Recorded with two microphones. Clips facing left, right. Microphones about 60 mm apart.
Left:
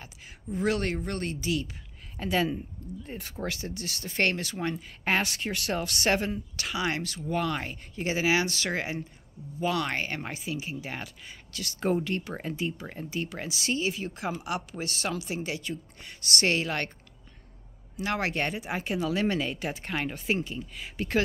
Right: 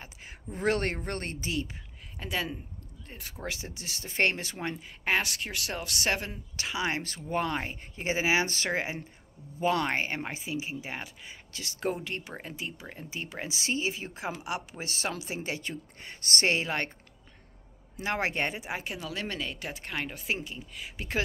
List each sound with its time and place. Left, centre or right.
0.0 s a woman's voice: right
2.1 s speech: centre
3.4 s speech: centre
5.0 s speech: centre
6.3 s speech: centre
7.0 s speech: right; by 13.0 s centre
13.1 s speech: centre
18.0 s speech: right
18.7 s speech: centre